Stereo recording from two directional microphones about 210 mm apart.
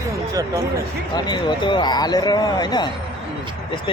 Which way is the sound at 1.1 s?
20° left (ahead or behind).